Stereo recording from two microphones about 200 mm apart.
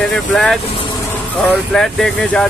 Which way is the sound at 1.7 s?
5° left (ahead or behind).